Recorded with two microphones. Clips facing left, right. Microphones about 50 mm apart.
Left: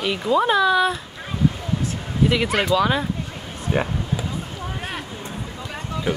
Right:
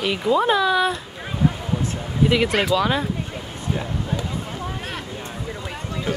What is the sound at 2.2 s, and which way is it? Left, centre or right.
Speech, centre.